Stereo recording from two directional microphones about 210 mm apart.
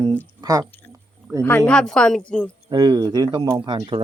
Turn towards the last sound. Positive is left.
turn(degrees=-20)  # may be behind; listen again after turning